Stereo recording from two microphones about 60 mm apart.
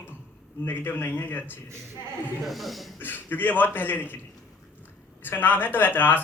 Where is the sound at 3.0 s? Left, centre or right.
Left.